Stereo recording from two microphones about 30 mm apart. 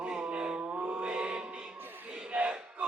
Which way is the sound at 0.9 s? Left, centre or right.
Right.